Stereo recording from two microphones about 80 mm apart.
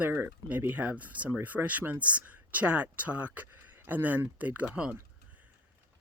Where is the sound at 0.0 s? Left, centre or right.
Right.